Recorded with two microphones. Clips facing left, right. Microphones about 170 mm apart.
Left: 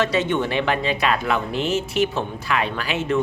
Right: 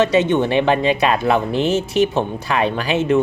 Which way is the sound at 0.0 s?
25° right (ahead or behind).